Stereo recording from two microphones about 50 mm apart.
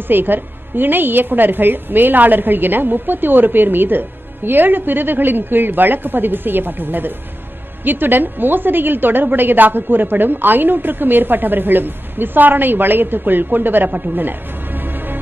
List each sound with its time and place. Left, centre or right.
0.1 s a woman's voice: right